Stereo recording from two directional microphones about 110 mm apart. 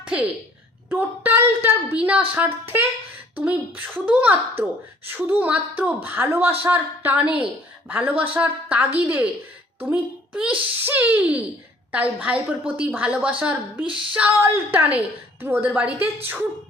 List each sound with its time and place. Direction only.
0.0 s a woman's voice: 10° right (ahead or behind)